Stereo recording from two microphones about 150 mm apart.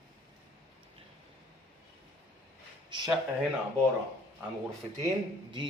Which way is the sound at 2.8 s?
30° right (ahead or behind).